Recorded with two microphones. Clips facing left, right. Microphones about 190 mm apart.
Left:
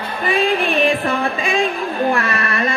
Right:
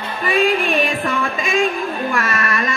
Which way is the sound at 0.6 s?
35° left (ahead or behind).